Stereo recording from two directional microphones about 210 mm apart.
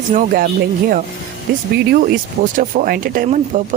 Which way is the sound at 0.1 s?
40° right (ahead or behind).